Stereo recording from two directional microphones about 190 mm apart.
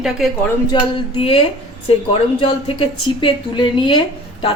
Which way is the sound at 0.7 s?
30° left (ahead or behind).